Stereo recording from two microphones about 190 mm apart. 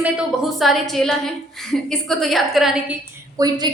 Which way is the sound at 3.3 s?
20° right (ahead or behind).